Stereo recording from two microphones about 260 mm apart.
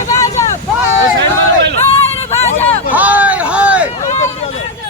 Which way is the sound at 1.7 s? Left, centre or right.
Left.